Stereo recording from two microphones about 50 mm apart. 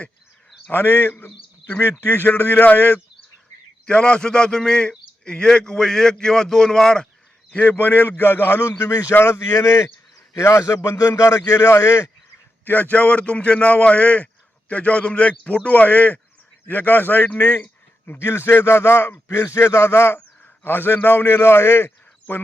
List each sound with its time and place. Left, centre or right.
0.7 s a man's voice: left
1.1 s speech: left
2.0 s speech: left
3.8 s a man's voice: centre
7.5 s a man's voice: left
8.8 s a man's voice: left
12.6 s a man's voice: left
18.2 s speech: left
19.3 s speech: left
20.7 s a man's voice: left